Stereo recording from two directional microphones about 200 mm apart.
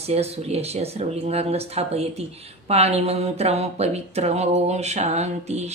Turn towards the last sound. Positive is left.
turn(degrees=-35)  # may be behind; listen again after turning